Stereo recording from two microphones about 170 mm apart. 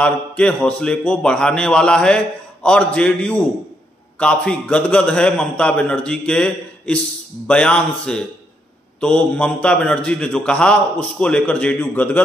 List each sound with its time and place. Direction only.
0.0 s a man's voice: 5° left (ahead or behind)